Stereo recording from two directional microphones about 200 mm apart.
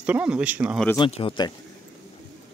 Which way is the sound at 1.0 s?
30° left (ahead or behind).